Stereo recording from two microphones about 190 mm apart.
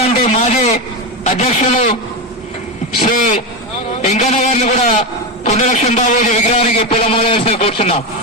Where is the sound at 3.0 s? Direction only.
40° left (ahead or behind).